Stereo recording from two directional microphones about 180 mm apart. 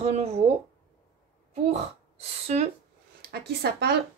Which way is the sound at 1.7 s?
35° right (ahead or behind).